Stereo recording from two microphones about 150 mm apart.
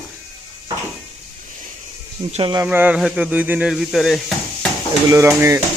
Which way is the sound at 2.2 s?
35° right (ahead or behind).